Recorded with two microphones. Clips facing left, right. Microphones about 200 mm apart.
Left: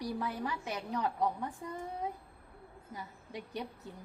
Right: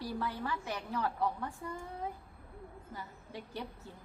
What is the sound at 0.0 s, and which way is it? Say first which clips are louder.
A woman's voice: left 1 dB; 15° left (ahead or behind).